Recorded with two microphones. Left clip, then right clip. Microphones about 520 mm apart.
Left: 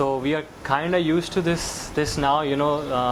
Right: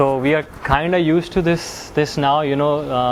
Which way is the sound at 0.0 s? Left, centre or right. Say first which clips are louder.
Right 7 dB; right.